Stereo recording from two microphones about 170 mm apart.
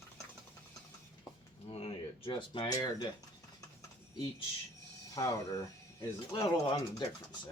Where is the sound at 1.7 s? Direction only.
35° left (ahead or behind).